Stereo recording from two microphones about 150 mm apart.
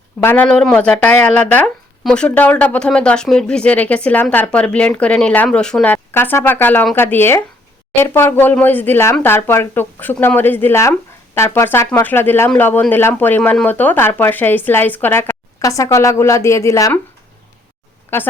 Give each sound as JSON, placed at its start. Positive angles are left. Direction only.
{"t": 0.2, "sound": "speech", "side_deg": 15}
{"t": 0.4, "sound": "speech", "side_deg": 5}
{"t": 18.1, "sound": "speech", "side_deg": 15}